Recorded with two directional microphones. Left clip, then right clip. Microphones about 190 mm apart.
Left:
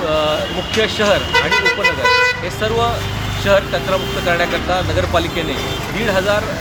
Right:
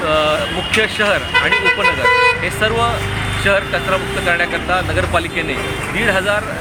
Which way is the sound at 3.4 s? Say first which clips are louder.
Left 1 dB; 10° left (ahead or behind).